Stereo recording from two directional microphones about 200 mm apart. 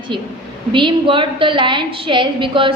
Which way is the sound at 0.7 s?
25° right (ahead or behind).